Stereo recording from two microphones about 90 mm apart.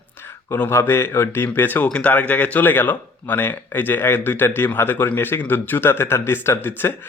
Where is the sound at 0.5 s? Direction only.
30° left (ahead or behind).